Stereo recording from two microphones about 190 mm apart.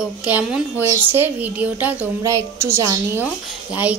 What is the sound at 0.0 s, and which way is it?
A woman's voice, 5° right (ahead or behind).